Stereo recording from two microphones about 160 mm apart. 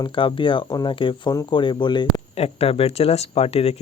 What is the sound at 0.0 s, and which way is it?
Speech, 30° left (ahead or behind).